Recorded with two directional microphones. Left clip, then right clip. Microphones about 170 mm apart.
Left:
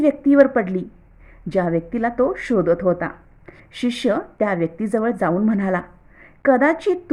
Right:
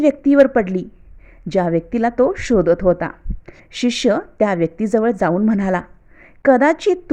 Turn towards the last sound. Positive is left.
turn(degrees=-35)  # may be behind; listen again after turning